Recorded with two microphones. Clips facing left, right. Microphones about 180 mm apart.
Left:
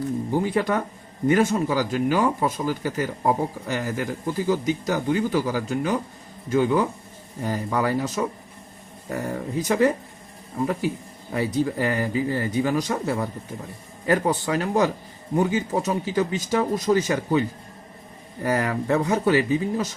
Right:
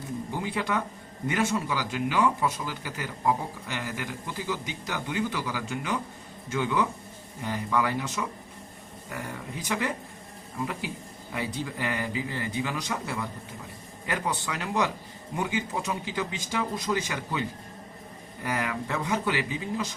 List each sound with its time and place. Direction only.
0.3 s speech: 45° left (ahead or behind)
18.4 s speech: 40° left (ahead or behind)